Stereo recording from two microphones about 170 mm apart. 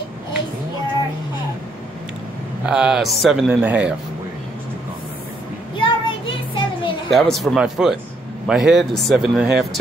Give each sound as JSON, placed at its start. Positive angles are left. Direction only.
{"t": 2.6, "sound": "speech", "side_deg": -5}
{"t": 5.8, "sound": "child singing", "side_deg": 30}
{"t": 7.1, "sound": "speech", "side_deg": 0}